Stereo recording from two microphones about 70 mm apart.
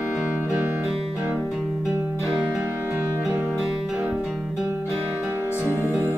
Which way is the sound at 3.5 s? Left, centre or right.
Centre.